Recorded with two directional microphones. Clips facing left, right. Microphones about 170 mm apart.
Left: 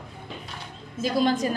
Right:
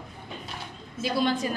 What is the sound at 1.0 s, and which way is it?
Speech, 45° left (ahead or behind).